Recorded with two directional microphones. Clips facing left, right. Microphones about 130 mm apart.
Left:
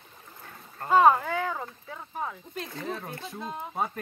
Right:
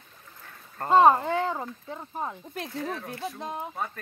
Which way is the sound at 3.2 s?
55° right (ahead or behind).